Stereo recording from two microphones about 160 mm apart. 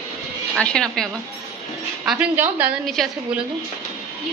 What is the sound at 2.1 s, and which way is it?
Speech, 10° right (ahead or behind).